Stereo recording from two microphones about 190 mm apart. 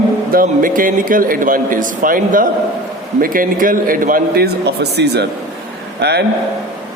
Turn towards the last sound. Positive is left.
turn(degrees=-60)  # may be behind; listen again after turning